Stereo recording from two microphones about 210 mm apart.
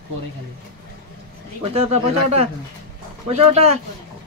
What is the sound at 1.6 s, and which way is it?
Speech, 30° right (ahead or behind).